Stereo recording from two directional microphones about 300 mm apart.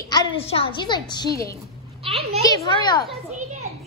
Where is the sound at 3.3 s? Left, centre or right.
Right.